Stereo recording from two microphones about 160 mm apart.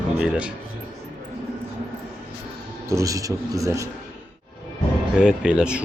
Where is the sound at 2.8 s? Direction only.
20° right (ahead or behind).